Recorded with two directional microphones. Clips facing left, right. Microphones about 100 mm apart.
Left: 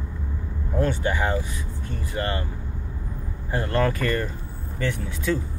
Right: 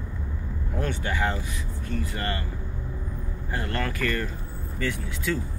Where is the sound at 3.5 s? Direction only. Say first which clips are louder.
Left 7 dB; 25° left (ahead or behind).